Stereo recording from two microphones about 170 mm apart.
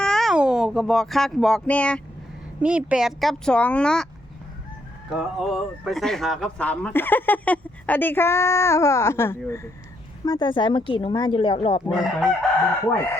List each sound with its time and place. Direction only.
0.0 s speech: centre (ahead or behind)
2.6 s speech: 5° right (ahead or behind)
5.1 s speech: centre (ahead or behind); by 11.8 s 35° left (ahead or behind)
11.9 s speech: centre (ahead or behind)